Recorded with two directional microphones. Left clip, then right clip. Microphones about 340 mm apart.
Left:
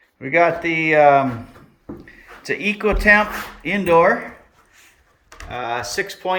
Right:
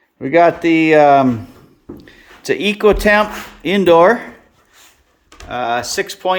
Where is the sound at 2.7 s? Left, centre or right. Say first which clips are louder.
Right 3 dB; centre.